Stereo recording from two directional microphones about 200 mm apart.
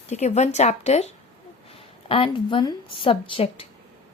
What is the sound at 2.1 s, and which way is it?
A woman's voice, 25° left (ahead or behind).